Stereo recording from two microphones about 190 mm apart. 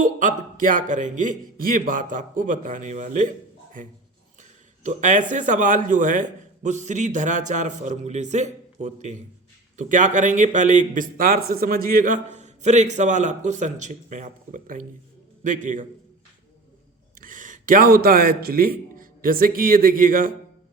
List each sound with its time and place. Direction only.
0.0 s a man's voice: 45° right (ahead or behind)
4.8 s a man's voice: 40° right (ahead or behind)
17.2 s a man's voice: 45° right (ahead or behind)